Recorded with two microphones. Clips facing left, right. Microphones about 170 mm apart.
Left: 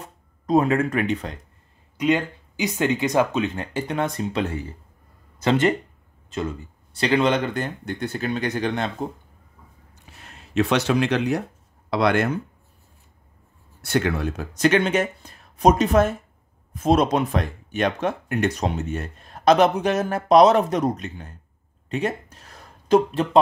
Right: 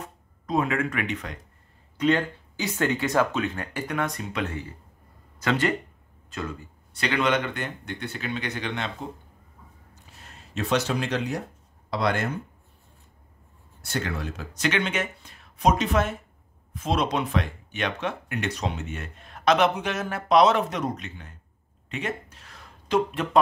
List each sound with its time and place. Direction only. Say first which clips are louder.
0.0 s speech: left 2 dB; 35° left (ahead or behind)
2.0 s speech: left 2 dB; 15° left (ahead or behind); by 8.9 s 40° left (ahead or behind)
10.1 s speech: left 12 dB; 70° left (ahead or behind)
13.8 s speech: left 8 dB; 60° left (ahead or behind); by 21.3 s 40° left (ahead or behind)
21.8 s a sound: left 6 dB; 40° left (ahead or behind)